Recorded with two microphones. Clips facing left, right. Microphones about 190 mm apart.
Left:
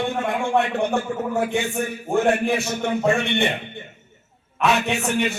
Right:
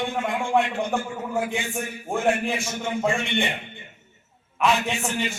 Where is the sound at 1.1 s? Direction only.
55° left (ahead or behind).